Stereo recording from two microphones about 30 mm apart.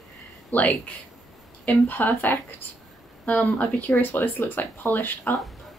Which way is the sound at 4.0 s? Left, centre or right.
Left.